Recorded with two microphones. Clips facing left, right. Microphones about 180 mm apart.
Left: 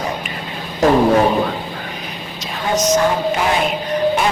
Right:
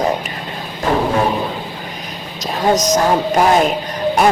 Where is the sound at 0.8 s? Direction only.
90° left.